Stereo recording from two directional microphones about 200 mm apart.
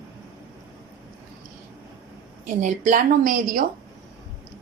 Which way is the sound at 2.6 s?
40° right (ahead or behind).